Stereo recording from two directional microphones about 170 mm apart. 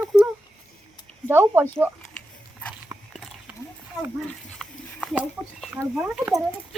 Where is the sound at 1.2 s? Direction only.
15° right (ahead or behind).